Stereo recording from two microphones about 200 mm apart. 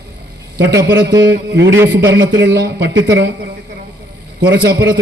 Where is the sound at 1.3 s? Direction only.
60° right (ahead or behind).